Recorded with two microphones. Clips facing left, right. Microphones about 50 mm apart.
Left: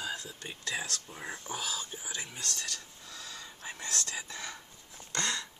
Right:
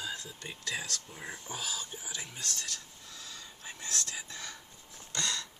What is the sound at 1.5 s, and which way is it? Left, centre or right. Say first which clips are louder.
Speech: left 2 dB; centre.